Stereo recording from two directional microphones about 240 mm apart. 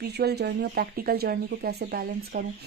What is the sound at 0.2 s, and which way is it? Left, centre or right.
Speech, right.